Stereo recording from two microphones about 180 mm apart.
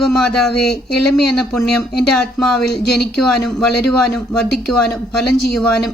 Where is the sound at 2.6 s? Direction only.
65° left (ahead or behind).